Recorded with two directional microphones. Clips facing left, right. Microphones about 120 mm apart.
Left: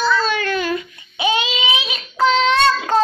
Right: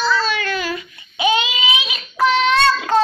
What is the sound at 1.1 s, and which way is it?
Child singing, 20° left (ahead or behind).